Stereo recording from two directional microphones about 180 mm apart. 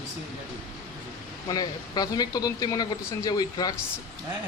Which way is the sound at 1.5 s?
20° left (ahead or behind).